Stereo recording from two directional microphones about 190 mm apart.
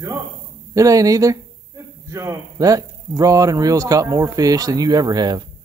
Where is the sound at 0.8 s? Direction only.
15° right (ahead or behind).